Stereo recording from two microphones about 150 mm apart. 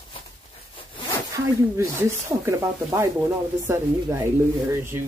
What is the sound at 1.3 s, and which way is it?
Speech, 20° right (ahead or behind).